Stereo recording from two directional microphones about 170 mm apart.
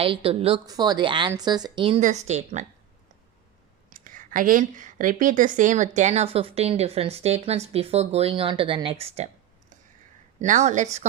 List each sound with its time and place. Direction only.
0.0 s speech: 35° right (ahead or behind)
0.6 s speech: 25° right (ahead or behind)
2.0 s a woman's voice: 45° right (ahead or behind)
3.8 s a woman's voice: 50° right (ahead or behind)